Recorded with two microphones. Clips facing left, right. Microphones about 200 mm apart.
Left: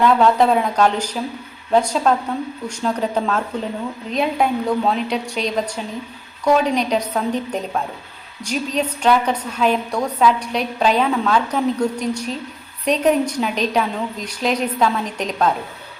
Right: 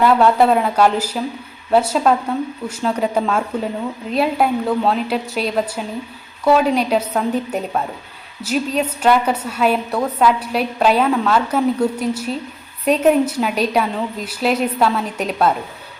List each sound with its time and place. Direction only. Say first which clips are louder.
0.0 s a woman's voice: right 1 dB; 5° right (ahead or behind)